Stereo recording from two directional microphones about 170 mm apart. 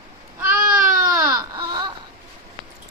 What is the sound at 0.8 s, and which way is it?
Baby cry, 55° right (ahead or behind).